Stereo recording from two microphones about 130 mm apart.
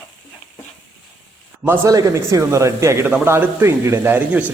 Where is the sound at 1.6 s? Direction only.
15° right (ahead or behind).